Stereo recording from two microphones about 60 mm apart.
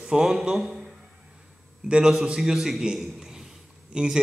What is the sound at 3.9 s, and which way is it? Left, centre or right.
Speech, centre.